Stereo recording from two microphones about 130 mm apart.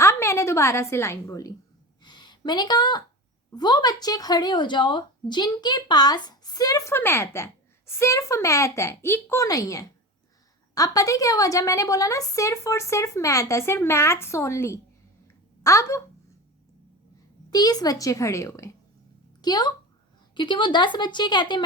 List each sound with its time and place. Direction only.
0.0 s a woman's voice: 20° left (ahead or behind)
2.0 s a sound: 35° left (ahead or behind)
3.5 s speech: 35° left (ahead or behind)
17.5 s a woman's voice: 30° left (ahead or behind)